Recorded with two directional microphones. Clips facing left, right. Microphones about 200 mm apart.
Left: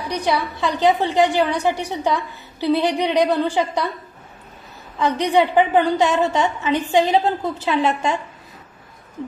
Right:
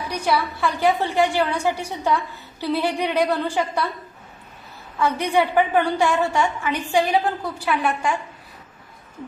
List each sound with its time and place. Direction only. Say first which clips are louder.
0.1 s a woman's voice: left 1 dB; 15° left (ahead or behind)
4.9 s a woman's voice: left 3 dB; 20° left (ahead or behind)